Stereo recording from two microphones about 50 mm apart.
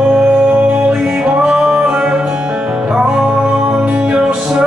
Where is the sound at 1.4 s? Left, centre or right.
Centre.